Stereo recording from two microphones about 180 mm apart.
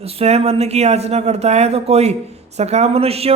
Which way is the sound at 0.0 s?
35° right (ahead or behind).